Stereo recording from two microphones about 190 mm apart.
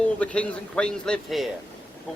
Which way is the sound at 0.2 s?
5° left (ahead or behind).